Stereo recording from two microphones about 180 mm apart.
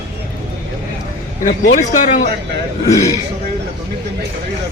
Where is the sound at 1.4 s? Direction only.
45° left (ahead or behind).